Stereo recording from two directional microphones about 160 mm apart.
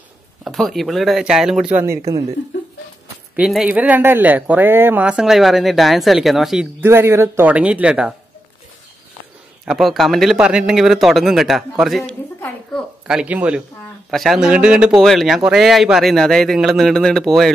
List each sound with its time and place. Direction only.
0.4 s speech: centre (ahead or behind)
2.1 s speech: 20° right (ahead or behind)
3.3 s speech: 5° right (ahead or behind)
6.8 s speech: 15° right (ahead or behind)
9.7 s speech: centre (ahead or behind)
12.1 s a sound: 5° left (ahead or behind)
13.0 s speech: 5° right (ahead or behind)